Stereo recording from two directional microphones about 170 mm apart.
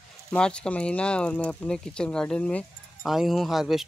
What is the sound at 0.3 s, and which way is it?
Speech, 5° left (ahead or behind).